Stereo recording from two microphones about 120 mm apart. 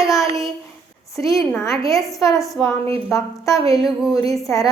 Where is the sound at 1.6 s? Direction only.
Centre (ahead or behind).